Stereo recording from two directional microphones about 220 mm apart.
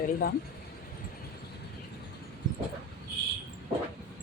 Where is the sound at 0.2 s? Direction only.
45° left (ahead or behind).